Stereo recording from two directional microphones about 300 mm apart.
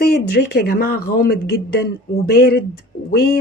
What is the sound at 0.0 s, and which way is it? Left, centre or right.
Speech, left.